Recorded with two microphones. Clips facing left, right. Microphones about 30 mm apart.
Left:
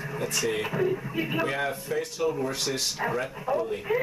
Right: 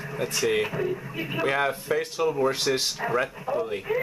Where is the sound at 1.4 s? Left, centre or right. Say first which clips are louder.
Right 4 dB; centre.